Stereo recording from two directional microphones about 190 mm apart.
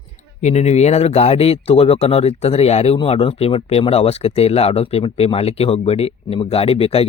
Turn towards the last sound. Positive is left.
turn(degrees=30)  # may be behind; listen again after turning